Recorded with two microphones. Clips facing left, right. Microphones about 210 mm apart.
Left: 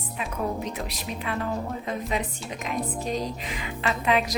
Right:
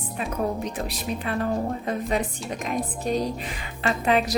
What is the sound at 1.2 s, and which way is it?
A woman's voice, 40° right (ahead or behind).